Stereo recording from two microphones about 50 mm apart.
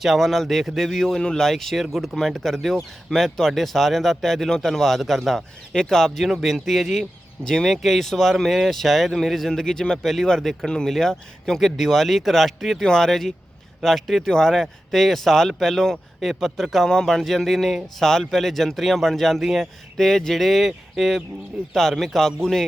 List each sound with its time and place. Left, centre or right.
0.0 s speech: centre